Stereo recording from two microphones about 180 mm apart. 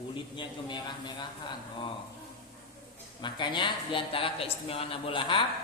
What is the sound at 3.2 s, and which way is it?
Speech, 25° left (ahead or behind).